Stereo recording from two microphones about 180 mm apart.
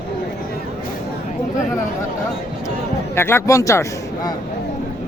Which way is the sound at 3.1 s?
15° left (ahead or behind).